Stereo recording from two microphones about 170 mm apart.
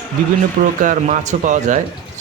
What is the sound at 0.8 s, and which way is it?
Speech, 50° right (ahead or behind).